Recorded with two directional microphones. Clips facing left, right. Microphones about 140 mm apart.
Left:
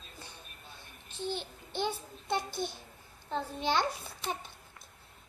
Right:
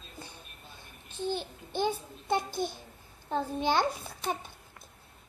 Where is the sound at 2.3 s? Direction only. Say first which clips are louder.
Right 4 dB; 45° right (ahead or behind).